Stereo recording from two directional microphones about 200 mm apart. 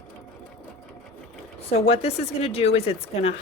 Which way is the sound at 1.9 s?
30° left (ahead or behind).